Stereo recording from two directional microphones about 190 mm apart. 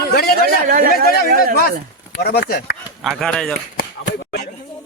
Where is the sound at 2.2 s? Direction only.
55° left (ahead or behind).